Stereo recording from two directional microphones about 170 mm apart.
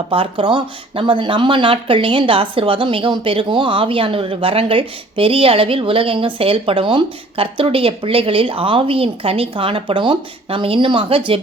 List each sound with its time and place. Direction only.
0.1 s speech: 30° right (ahead or behind)